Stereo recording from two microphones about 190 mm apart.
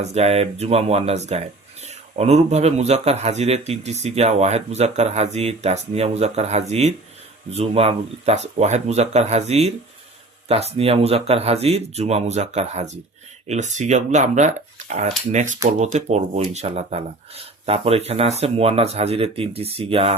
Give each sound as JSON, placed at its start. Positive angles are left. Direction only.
{"t": 0.0, "sound": "a man's voice", "side_deg": -35}